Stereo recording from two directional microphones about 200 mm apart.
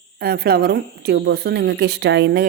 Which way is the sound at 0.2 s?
50° right (ahead or behind).